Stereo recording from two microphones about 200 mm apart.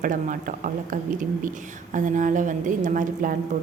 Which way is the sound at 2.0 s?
40° right (ahead or behind).